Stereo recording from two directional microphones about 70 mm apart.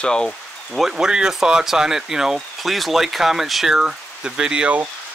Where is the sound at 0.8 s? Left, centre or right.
Centre.